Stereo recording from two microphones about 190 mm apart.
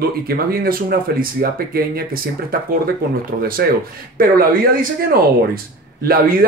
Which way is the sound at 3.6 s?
60° right (ahead or behind).